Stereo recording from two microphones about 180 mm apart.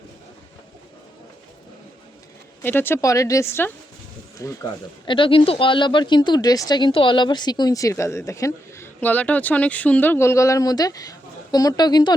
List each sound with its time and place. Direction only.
2.6 s speech: 10° left (ahead or behind)
5.0 s speech: 30° left (ahead or behind)